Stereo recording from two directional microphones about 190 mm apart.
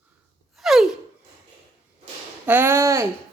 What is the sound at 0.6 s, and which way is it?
Gasp, centre (ahead or behind).